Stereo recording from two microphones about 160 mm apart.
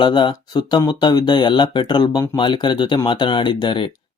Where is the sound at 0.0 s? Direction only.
30° left (ahead or behind).